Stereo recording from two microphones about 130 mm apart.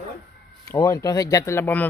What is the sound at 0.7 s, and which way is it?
Speech, 25° left (ahead or behind).